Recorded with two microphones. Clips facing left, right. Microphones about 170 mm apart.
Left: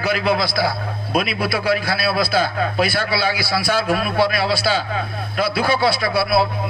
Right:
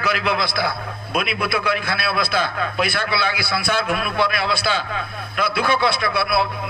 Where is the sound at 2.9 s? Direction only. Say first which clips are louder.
Left 2 dB; 50° right (ahead or behind).